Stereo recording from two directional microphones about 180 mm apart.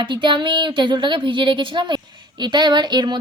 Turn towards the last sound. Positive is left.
turn(degrees=-25)  # may be behind; listen again after turning